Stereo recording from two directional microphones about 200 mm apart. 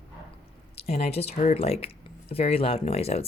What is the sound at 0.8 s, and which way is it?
Speech, 30° left (ahead or behind).